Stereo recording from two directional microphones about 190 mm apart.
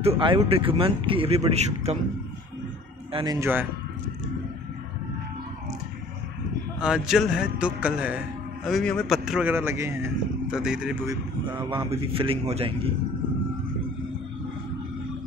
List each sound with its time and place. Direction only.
0.0 s a man's voice: 30° right (ahead or behind)
3.1 s speech: 30° right (ahead or behind)
3.3 s speech: 10° right (ahead or behind)
6.8 s a man's voice: 5° right (ahead or behind)
11.7 s speech: 25° right (ahead or behind)